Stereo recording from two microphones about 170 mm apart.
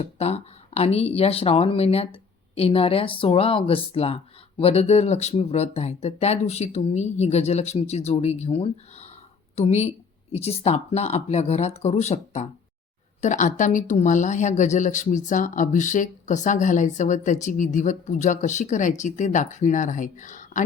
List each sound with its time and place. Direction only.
0.0 s speech: 40° left (ahead or behind)